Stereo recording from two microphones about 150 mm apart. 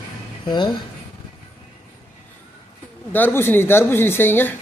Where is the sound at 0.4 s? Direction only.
30° left (ahead or behind).